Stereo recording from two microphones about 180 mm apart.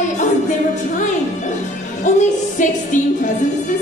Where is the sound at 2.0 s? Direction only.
45° left (ahead or behind).